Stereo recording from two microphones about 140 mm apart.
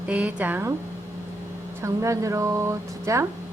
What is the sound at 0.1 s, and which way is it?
Speech, 10° right (ahead or behind).